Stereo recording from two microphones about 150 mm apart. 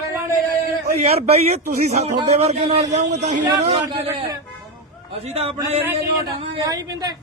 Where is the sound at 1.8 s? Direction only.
45° right (ahead or behind).